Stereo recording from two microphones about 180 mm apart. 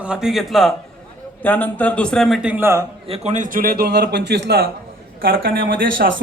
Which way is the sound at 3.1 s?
40° right (ahead or behind).